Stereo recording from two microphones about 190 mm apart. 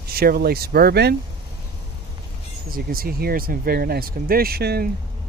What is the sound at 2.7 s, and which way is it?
Speech, 50° right (ahead or behind).